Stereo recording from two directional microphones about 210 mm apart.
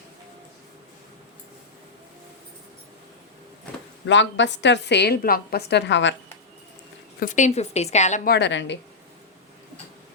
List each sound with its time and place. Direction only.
4.0 s a woman's voice: 60° left (ahead or behind)
7.2 s a woman's voice: 35° left (ahead or behind); by 8.8 s 60° left (ahead or behind)